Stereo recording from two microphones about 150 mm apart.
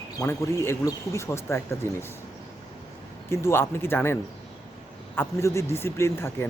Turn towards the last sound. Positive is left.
turn(degrees=15)  # may be behind; listen again after turning